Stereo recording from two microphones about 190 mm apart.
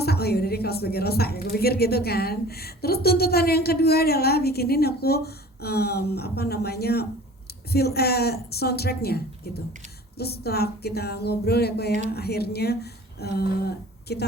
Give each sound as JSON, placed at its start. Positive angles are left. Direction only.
{"t": 0.0, "sound": "a woman's voice", "side_deg": 55}